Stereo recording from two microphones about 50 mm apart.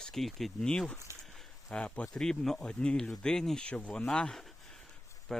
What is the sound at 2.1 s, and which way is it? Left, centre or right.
Speech, centre.